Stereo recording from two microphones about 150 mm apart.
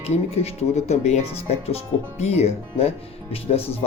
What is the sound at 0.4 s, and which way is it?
Speech, 50° left (ahead or behind).